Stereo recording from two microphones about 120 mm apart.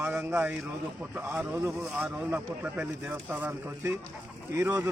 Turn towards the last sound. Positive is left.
turn(degrees=-15)  # may be behind; listen again after turning